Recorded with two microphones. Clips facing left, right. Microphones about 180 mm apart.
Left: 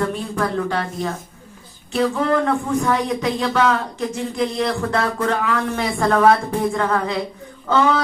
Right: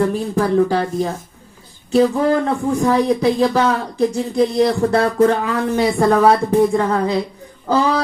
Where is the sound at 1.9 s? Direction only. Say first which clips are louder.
Right 4 dB; 30° right (ahead or behind).